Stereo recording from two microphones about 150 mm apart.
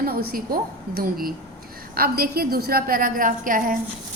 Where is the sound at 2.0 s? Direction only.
90° right; by 3.8 s 65° right (ahead or behind).